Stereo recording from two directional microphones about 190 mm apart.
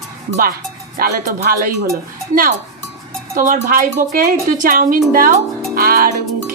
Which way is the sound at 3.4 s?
45° right (ahead or behind).